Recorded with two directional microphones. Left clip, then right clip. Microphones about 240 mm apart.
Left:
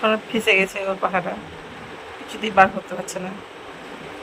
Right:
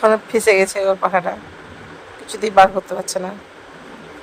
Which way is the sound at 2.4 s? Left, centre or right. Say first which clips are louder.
Right 4 dB; centre.